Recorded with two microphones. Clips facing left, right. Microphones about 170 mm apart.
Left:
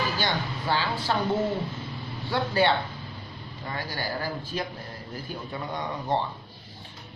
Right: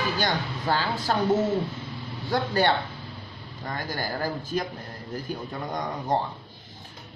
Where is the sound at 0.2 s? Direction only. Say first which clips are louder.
Right 2 dB; 45° right (ahead or behind).